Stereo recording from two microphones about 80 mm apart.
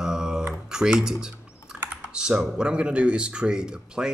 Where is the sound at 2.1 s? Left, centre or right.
Centre.